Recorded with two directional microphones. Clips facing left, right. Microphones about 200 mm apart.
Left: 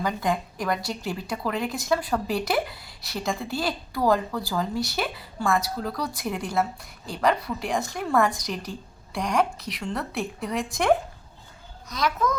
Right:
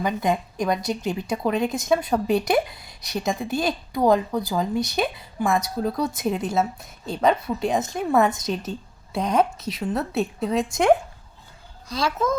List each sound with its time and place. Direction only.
0.0 s a woman's voice: 20° right (ahead or behind)